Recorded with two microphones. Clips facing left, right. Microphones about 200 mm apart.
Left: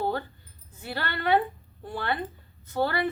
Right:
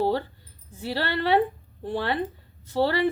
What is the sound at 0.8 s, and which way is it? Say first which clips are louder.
Speech: right 6 dB; 30° right (ahead or behind).